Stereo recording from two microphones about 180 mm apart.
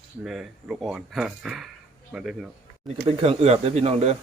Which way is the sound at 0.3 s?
Centre (ahead or behind).